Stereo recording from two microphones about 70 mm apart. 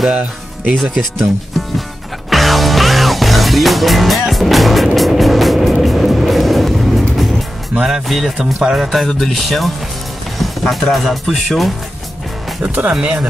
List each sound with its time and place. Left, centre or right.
0.1 s speech: centre
0.7 s speech: centre
2.2 s music: centre
7.7 s speech: centre
12.6 s speech: right